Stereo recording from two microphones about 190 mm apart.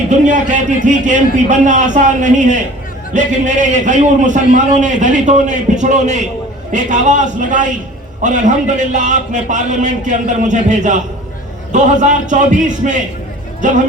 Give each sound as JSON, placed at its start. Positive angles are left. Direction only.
{"t": 0.1, "sound": "a man's voice", "side_deg": -40}